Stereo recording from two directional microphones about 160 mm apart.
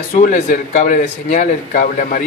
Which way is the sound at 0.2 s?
55° left (ahead or behind).